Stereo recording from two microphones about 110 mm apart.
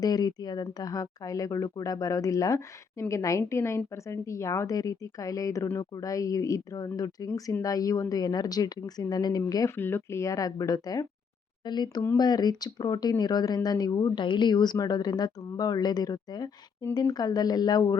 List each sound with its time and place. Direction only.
0.0 s a woman's voice: 35° left (ahead or behind)
9.6 s speech: 20° left (ahead or behind); by 17.9 s 35° left (ahead or behind)